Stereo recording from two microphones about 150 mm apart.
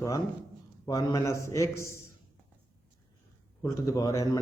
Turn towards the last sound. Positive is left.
turn(degrees=25)  # may be behind; listen again after turning